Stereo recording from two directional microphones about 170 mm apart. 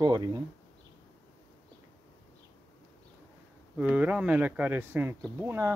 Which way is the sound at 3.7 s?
5° right (ahead or behind).